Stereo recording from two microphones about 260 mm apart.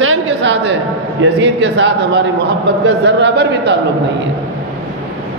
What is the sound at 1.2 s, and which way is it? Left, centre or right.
A man's voice, right.